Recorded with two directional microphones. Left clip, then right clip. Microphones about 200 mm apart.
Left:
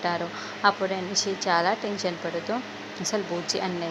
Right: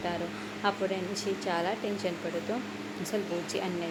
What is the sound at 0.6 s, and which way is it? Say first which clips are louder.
A woman's voice: left 7 dB; 10° left (ahead or behind).